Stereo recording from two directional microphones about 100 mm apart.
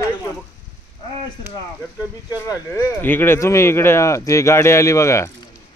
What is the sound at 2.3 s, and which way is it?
Speech, 30° left (ahead or behind).